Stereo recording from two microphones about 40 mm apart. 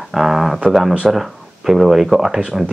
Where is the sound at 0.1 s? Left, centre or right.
Centre.